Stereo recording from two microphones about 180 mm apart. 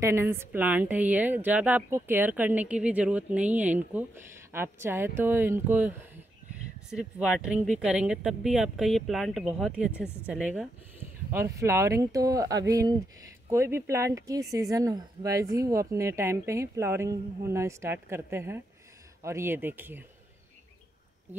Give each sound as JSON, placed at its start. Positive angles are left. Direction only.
{"t": 0.0, "sound": "a woman's voice", "side_deg": -15}